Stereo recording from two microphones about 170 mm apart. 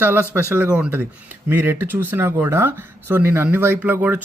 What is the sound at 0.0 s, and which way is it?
Speech, 10° right (ahead or behind).